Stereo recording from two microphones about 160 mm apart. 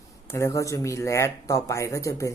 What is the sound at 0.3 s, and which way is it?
Speech, 20° left (ahead or behind).